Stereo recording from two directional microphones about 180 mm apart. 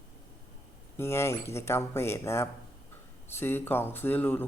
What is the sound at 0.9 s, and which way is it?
A man's voice, 15° left (ahead or behind).